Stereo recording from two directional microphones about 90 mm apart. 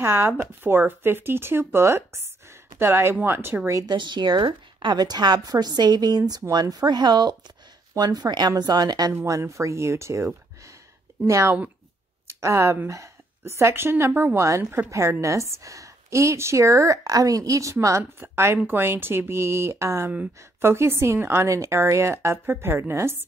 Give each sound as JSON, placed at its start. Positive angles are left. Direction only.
{"t": 0.0, "sound": "a woman's voice", "side_deg": -30}
{"t": 3.8, "sound": "a woman's voice", "side_deg": -55}
{"t": 9.1, "sound": "a woman's voice", "side_deg": -30}